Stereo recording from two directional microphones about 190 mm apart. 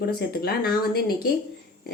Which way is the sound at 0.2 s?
55° left (ahead or behind).